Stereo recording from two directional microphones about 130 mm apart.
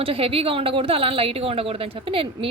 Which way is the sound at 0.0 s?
45° right (ahead or behind).